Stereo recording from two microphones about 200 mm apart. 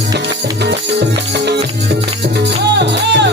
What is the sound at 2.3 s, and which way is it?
Music, 60° right (ahead or behind).